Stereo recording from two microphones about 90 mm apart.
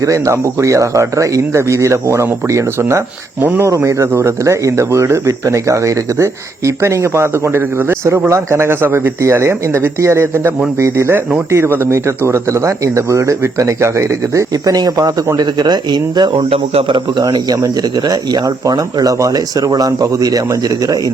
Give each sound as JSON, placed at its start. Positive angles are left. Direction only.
{"t": 0.0, "sound": "speech", "side_deg": -35}
{"t": 17.2, "sound": "speech", "side_deg": -50}